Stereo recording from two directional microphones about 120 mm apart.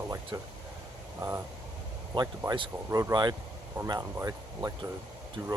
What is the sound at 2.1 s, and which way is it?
Speech, 40° right (ahead or behind).